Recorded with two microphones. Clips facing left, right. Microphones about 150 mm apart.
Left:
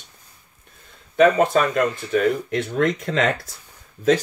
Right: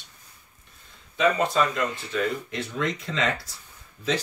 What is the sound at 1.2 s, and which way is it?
Speech, 55° left (ahead or behind).